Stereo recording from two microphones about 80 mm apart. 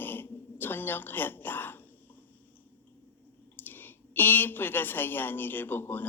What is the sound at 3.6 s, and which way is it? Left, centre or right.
A woman's voice, left.